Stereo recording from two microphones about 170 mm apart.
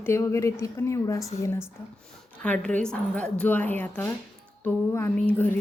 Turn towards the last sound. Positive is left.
turn(degrees=10)  # may be behind; listen again after turning